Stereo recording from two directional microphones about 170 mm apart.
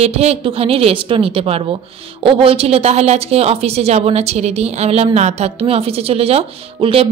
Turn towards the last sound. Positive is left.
turn(degrees=-35)  # may be behind; listen again after turning